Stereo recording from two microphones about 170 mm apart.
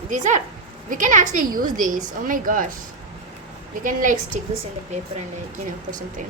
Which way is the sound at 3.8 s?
50° right (ahead or behind).